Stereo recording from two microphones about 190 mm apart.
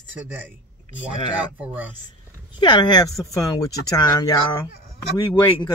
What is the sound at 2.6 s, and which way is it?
Speech, 25° left (ahead or behind).